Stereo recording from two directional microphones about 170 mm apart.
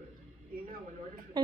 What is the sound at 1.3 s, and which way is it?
Speech, 25° right (ahead or behind).